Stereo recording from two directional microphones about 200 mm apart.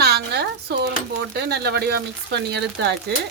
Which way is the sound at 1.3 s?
55° right (ahead or behind).